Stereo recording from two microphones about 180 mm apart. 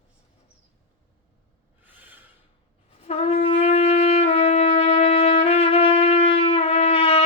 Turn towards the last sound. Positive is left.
turn(degrees=30)  # may be behind; listen again after turning